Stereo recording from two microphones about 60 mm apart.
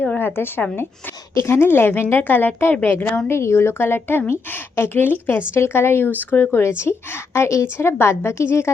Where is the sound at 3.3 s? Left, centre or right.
Left.